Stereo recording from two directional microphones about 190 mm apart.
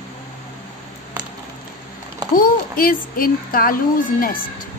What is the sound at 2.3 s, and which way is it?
Speech, 45° left (ahead or behind).